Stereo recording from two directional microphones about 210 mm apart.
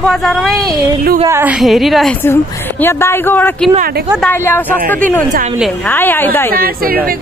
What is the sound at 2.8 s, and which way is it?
Speech, 10° left (ahead or behind).